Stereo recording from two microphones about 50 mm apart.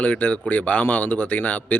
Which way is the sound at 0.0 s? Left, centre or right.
Left.